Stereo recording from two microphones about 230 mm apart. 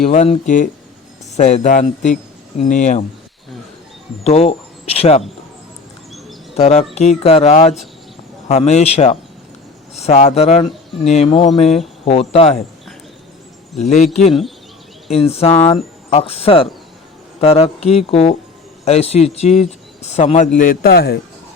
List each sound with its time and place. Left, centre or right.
0.0 s a man's voice: left
4.2 s speech: left
6.5 s speech: left
13.7 s speech: left
15.1 s a man's voice: left